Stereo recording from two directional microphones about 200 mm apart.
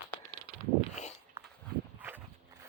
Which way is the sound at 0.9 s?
35° left (ahead or behind).